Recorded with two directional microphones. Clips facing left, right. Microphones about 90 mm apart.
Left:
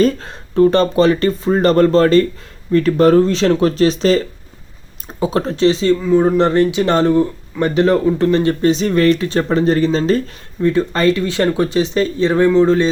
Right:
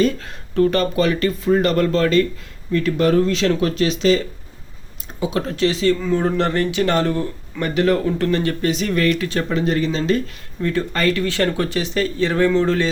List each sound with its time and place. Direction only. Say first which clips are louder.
0.0 s speech: left 4 dB; 30° left (ahead or behind)
10.6 s speech: left 6 dB; 20° left (ahead or behind)